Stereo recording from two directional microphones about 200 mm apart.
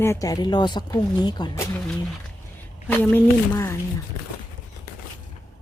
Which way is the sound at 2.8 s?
10° left (ahead or behind).